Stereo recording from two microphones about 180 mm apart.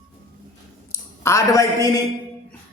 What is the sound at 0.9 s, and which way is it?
A woman's voice, 15° left (ahead or behind).